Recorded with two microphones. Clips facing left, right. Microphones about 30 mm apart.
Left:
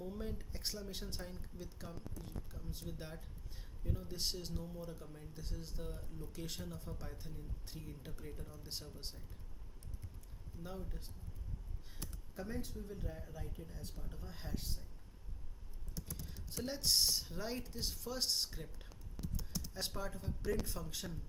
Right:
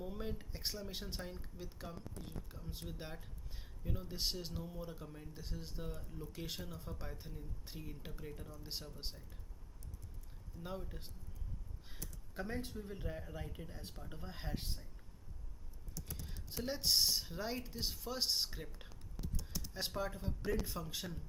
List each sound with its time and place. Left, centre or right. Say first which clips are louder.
0.0 s speech: right 1 dB; right
10.6 s speech: right 2 dB; right
12.3 s speech: right 2 dB; right
16.2 s speech: right 2 dB; centre